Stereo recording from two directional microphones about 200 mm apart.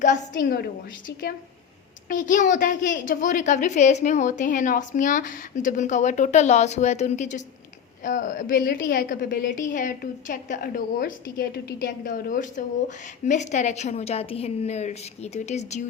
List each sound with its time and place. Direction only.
0.0 s a woman's voice: 40° left (ahead or behind)